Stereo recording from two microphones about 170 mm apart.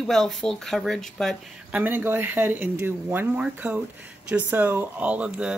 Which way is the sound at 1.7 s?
10° right (ahead or behind).